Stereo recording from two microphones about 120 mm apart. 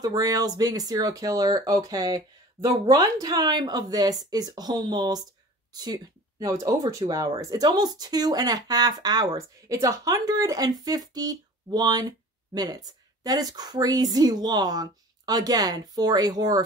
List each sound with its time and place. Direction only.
0.0 s speech: 30° right (ahead or behind)